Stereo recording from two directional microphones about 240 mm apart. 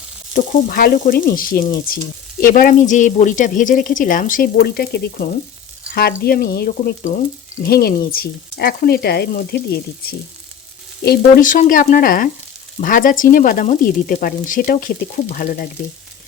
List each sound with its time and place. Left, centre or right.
0.3 s speech: left